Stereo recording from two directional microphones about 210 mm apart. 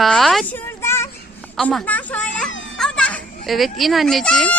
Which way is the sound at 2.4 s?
65° left (ahead or behind).